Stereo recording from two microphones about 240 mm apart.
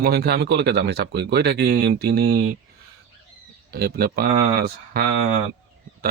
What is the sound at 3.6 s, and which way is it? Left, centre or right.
Speech, right.